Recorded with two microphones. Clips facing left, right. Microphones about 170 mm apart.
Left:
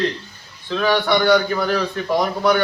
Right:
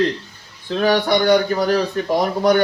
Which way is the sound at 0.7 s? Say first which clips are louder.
Right 1 dB; 40° right (ahead or behind).